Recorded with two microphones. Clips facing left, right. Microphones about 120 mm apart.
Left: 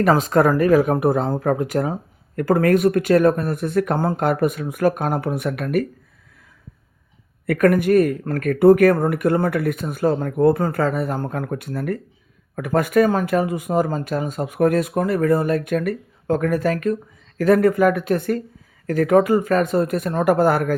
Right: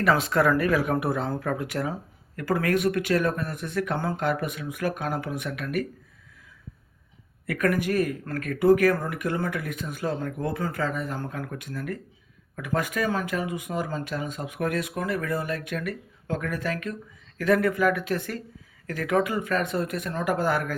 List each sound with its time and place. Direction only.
0.0 s speech: 40° left (ahead or behind)
7.4 s speech: 50° left (ahead or behind)